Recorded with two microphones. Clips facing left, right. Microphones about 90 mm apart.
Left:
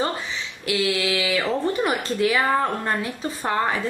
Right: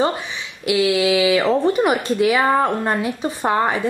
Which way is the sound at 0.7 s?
15° right (ahead or behind).